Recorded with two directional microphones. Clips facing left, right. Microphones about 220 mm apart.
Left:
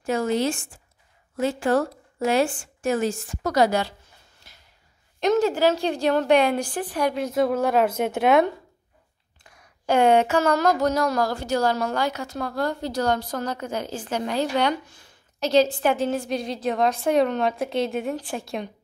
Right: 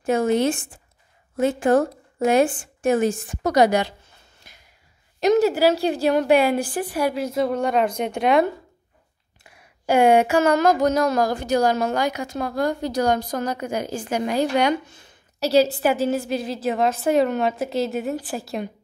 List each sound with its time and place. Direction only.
0.0 s a woman's voice: 20° right (ahead or behind)
4.4 s snort: 15° right (ahead or behind)
5.2 s speech: 5° right (ahead or behind)
9.4 s speech: 10° right (ahead or behind)
15.4 s a woman's voice: 10° right (ahead or behind)